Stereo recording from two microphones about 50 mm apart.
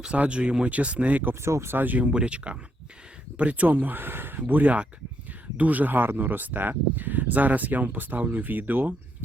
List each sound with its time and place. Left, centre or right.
0.2 s speech: right
1.4 s speech: right
1.7 s speech: right
2.0 s speech: right